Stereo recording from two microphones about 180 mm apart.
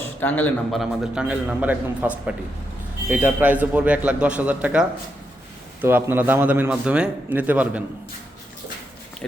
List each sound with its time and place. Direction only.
0.2 s speech: 10° left (ahead or behind)
0.8 s a man's voice: 5° right (ahead or behind)